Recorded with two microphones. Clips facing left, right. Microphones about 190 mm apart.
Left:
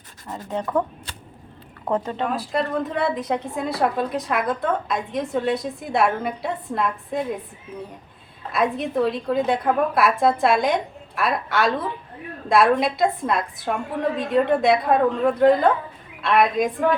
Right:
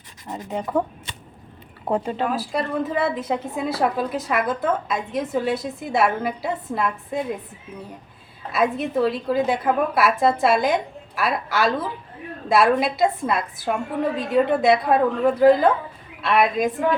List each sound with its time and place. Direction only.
0.3 s speech: 10° right (ahead or behind)
1.9 s a woman's voice: 10° right (ahead or behind)
8.5 s a woman's voice: centre (ahead or behind)